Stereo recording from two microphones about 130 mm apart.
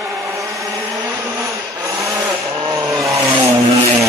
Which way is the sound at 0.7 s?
25° right (ahead or behind).